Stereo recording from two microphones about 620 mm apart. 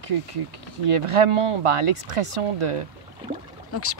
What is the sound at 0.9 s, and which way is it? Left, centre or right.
Speech, right.